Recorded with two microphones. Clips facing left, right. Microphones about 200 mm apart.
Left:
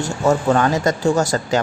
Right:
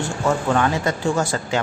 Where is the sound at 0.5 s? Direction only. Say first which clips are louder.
Left 3 dB; 40° left (ahead or behind).